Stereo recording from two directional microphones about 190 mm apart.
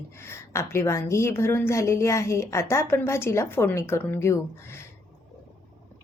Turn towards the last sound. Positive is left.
turn(degrees=15)  # may be behind; listen again after turning